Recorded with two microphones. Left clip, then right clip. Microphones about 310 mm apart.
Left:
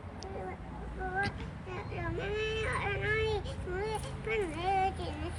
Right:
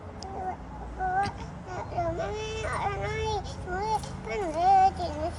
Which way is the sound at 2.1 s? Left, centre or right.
Right.